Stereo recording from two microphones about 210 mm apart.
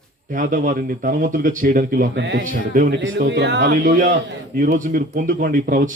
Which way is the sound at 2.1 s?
55° right (ahead or behind).